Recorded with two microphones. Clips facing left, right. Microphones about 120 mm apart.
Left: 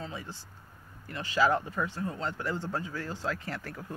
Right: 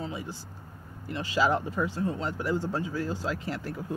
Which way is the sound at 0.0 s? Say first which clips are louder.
Right 4 dB; 15° right (ahead or behind).